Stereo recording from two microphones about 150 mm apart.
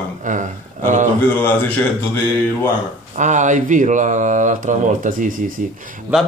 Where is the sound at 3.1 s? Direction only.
55° right (ahead or behind).